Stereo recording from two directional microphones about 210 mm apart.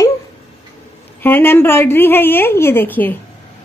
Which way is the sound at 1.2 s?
10° left (ahead or behind).